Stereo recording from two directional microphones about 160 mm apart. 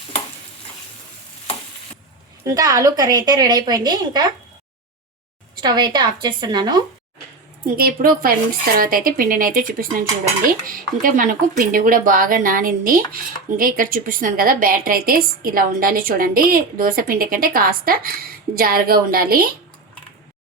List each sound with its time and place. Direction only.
2.4 s a woman's voice: 20° right (ahead or behind)
5.5 s a woman's voice: 25° right (ahead or behind)
7.8 s a woman's voice: 65° right (ahead or behind)